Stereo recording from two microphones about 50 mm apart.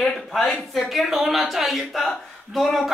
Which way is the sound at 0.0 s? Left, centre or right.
Centre.